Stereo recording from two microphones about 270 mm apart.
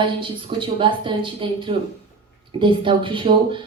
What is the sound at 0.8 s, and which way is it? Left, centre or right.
A woman's voice, centre.